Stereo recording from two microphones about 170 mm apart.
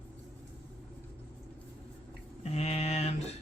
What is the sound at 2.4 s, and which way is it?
Speech, 40° left (ahead or behind).